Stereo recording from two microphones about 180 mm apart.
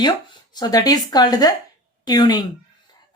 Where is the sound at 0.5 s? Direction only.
20° left (ahead or behind).